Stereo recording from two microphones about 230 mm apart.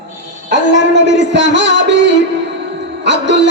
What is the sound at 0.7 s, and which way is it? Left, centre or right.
Music, right.